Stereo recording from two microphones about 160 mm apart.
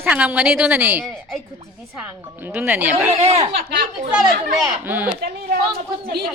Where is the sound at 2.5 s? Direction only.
10° right (ahead or behind).